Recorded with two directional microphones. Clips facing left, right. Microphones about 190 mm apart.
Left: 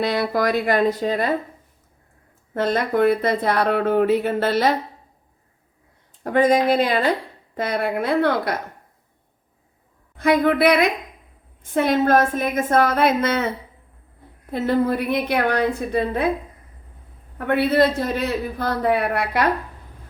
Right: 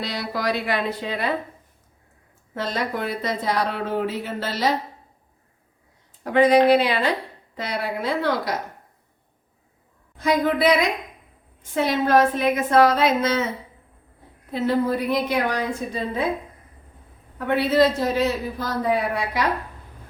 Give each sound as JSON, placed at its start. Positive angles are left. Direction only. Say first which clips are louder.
{"t": 0.0, "sound": "a woman's voice", "louder": "left 6 dB", "side_deg": 55}
{"t": 2.6, "sound": "speech", "louder": "left 7 dB", "side_deg": 55}
{"t": 6.2, "sound": "a woman's voice", "louder": "right 1 dB", "side_deg": 45}
{"t": 10.2, "sound": "a woman's voice", "louder": "left 3 dB", "side_deg": 60}
{"t": 14.5, "sound": "speech", "louder": "left 2 dB", "side_deg": 55}
{"t": 17.3, "sound": "speech", "louder": "left 1 dB", "side_deg": 55}